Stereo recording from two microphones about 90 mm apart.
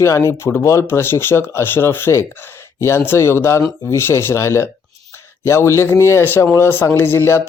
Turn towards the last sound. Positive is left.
turn(degrees=25)  # may be behind; listen again after turning